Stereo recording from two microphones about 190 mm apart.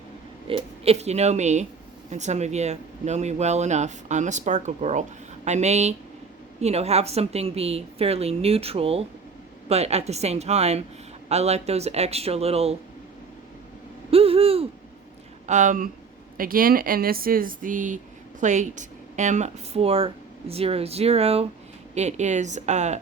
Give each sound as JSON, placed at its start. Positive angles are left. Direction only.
{"t": 0.4, "sound": "speech", "side_deg": -30}
{"t": 14.1, "sound": "a sound", "side_deg": -30}
{"t": 15.4, "sound": "speech", "side_deg": -40}